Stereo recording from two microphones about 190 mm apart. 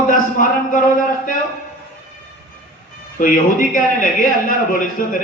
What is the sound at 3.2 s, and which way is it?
A man's voice, 45° left (ahead or behind).